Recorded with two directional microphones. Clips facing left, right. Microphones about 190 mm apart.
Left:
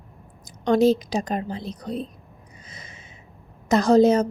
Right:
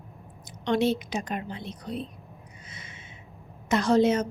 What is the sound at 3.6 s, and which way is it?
Speech, 40° left (ahead or behind).